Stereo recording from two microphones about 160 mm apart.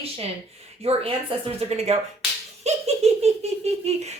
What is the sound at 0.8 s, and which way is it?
Speech, 35° right (ahead or behind).